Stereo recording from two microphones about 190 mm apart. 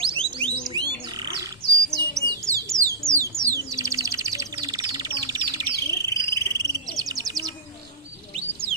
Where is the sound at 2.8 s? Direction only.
15° right (ahead or behind).